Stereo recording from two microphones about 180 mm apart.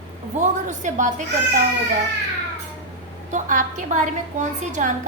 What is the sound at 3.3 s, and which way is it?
A woman's voice, 45° right (ahead or behind).